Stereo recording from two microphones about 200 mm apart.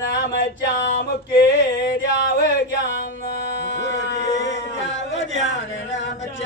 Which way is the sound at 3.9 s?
65° left (ahead or behind).